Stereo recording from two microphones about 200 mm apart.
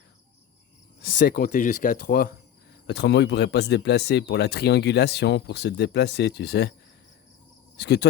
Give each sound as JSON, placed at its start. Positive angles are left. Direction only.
{"t": 1.0, "sound": "speech", "side_deg": 45}
{"t": 2.8, "sound": "speech", "side_deg": 55}
{"t": 7.8, "sound": "cricket", "side_deg": 55}